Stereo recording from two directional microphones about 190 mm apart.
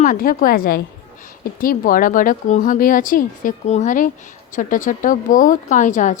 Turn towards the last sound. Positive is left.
turn(degrees=40)  # may be behind; listen again after turning